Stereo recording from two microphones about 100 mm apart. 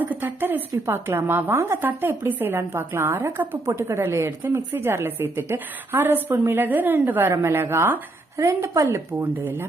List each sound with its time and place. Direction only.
0.0 s a woman's voice: 20° right (ahead or behind)
9.2 s a woman's voice: 20° right (ahead or behind)